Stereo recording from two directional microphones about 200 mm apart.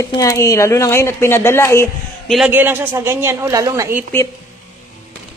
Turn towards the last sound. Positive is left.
turn(degrees=-15)  # may be behind; listen again after turning